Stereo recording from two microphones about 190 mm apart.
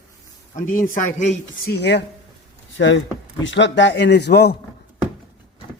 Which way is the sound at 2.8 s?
75° left (ahead or behind).